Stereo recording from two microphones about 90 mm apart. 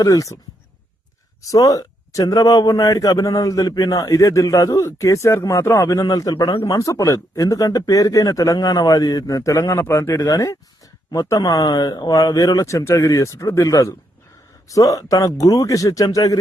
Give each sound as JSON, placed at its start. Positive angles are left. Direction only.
{"t": 0.0, "sound": "speech", "side_deg": 40}
{"t": 1.4, "sound": "speech", "side_deg": 40}
{"t": 6.3, "sound": "speech", "side_deg": 65}
{"t": 6.7, "sound": "speech", "side_deg": 40}
{"t": 10.2, "sound": "speech", "side_deg": 40}